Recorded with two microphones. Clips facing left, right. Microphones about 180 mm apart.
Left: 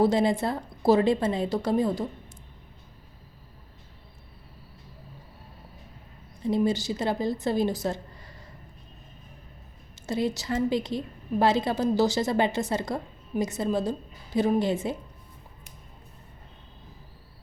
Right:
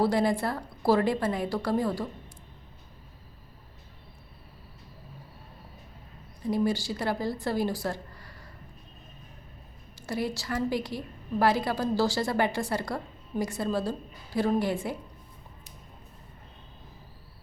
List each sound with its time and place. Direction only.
0.0 s a woman's voice: 20° left (ahead or behind)
6.4 s a woman's voice: 25° left (ahead or behind)
10.1 s a woman's voice: 20° left (ahead or behind)